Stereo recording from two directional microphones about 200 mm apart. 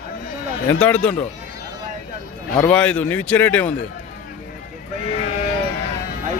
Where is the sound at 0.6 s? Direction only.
10° left (ahead or behind).